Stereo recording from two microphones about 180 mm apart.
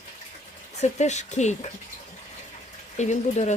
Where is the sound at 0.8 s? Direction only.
40° left (ahead or behind).